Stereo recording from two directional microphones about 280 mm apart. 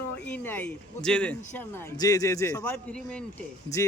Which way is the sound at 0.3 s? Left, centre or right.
Centre.